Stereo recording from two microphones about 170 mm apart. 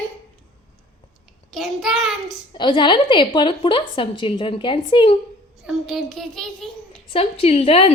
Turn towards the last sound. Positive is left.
turn(degrees=35)  # may be behind; listen again after turning